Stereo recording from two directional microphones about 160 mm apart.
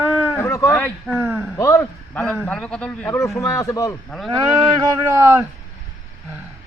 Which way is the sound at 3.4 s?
20° left (ahead or behind).